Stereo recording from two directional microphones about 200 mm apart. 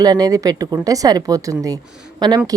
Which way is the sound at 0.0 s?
20° right (ahead or behind).